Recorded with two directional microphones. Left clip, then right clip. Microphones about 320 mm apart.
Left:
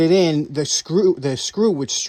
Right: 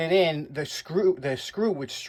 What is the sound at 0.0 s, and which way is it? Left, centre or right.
Speech, left.